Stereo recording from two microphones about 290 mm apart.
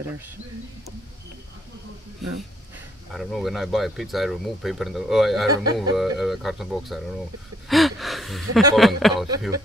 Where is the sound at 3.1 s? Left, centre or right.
Centre.